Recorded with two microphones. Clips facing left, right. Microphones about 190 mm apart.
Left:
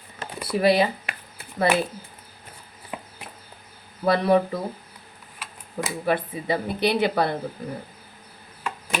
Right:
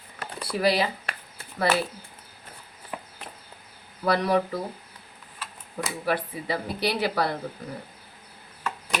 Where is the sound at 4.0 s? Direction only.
25° left (ahead or behind).